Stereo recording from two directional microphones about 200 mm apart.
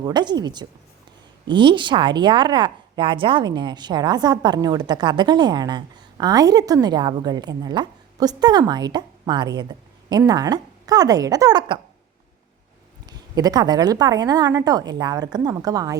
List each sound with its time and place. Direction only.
0.0 s speech: 20° right (ahead or behind)
13.1 s speech: 20° right (ahead or behind)